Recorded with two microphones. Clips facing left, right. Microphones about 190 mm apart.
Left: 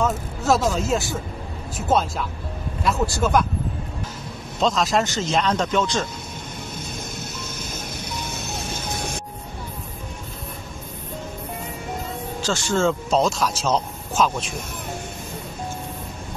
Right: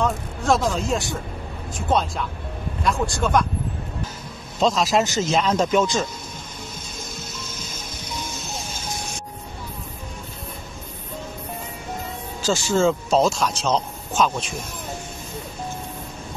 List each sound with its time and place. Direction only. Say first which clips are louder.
0.0 s speech: left 1 dB; 5° left (ahead or behind)
4.6 s speech: right 1 dB; centre (ahead or behind)
7.5 s music: left 3 dB; 55° left (ahead or behind)
12.4 s speech: right 2 dB; 5° right (ahead or behind)